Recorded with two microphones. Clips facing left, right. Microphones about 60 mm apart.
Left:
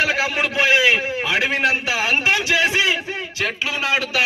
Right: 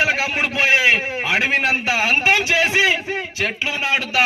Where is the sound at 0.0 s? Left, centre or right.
Centre.